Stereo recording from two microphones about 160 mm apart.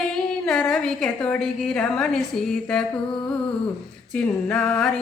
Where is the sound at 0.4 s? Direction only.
5° left (ahead or behind).